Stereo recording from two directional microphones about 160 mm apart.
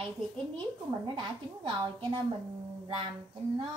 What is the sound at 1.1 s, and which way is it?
A woman's voice, 30° right (ahead or behind).